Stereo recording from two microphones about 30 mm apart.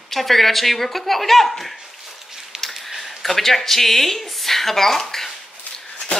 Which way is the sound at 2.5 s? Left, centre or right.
Centre.